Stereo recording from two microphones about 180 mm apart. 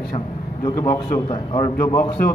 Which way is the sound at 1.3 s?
25° left (ahead or behind).